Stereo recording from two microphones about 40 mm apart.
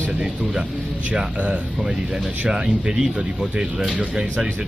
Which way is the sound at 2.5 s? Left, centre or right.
Centre.